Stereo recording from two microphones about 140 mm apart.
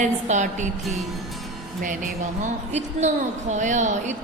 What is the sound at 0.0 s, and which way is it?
Speech, 60° right (ahead or behind).